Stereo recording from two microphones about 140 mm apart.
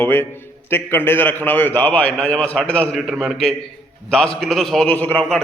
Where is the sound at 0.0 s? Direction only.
15° left (ahead or behind).